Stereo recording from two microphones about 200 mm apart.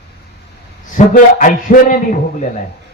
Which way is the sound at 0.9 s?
40° left (ahead or behind).